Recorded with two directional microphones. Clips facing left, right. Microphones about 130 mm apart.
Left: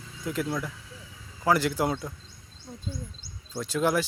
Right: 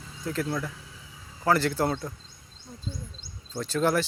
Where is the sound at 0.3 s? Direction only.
10° left (ahead or behind).